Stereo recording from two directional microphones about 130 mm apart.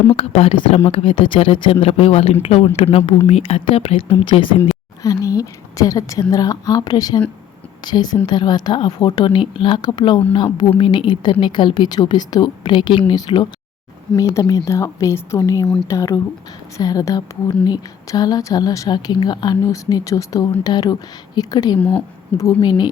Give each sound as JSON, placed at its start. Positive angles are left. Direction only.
{"t": 0.2, "sound": "speech", "side_deg": 50}
{"t": 5.0, "sound": "a woman's voice", "side_deg": 25}
{"t": 15.6, "sound": "speech", "side_deg": 5}
{"t": 15.9, "sound": "a woman's voice", "side_deg": 25}
{"t": 21.8, "sound": "a woman's voice", "side_deg": 10}
{"t": 22.4, "sound": "a woman's voice", "side_deg": 30}